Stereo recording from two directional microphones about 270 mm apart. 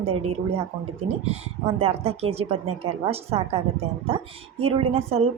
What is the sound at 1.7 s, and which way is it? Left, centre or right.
A woman's voice, right.